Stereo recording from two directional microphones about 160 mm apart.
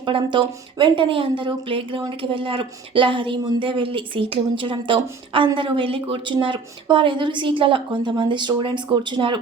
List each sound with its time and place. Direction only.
0.0 s a woman's voice: 30° right (ahead or behind)